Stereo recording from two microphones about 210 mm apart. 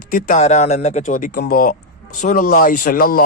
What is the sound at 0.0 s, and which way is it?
A man's voice, 40° left (ahead or behind).